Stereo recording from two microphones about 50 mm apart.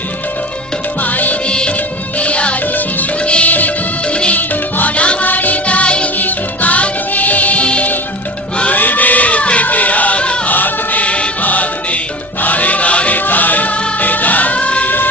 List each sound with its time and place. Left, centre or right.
1.0 s music: left
1.5 s music: left
4.4 s music: left
8.7 s music: left
10.5 s music: left